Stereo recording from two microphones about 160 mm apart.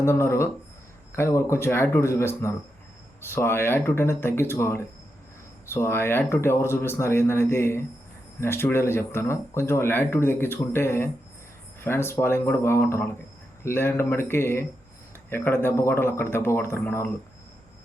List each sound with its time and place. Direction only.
0.0 s speech: 15° left (ahead or behind)